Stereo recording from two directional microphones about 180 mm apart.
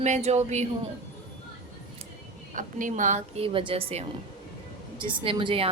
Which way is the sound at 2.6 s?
45° right (ahead or behind).